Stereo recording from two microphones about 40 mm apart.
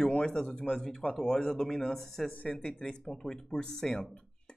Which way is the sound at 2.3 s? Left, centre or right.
Left.